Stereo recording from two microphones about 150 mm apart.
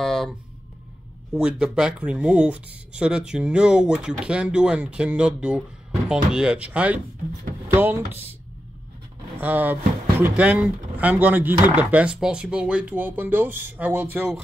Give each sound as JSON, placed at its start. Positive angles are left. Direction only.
{"t": 0.0, "sound": "a sound", "side_deg": 0}
{"t": 1.3, "sound": "speech", "side_deg": -5}
{"t": 7.6, "sound": "music", "side_deg": -15}
{"t": 8.1, "sound": "speech", "side_deg": -15}
{"t": 9.4, "sound": "speech", "side_deg": -10}